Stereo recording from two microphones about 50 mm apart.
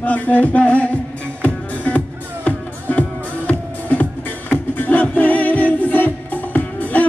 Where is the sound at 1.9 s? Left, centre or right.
Left.